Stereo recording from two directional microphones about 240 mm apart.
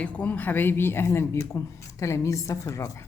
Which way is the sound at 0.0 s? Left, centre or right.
Centre.